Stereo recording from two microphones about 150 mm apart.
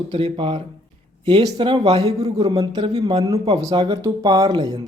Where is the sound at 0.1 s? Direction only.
35° right (ahead or behind).